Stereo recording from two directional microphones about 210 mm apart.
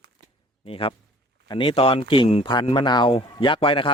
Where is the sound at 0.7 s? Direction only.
25° left (ahead or behind).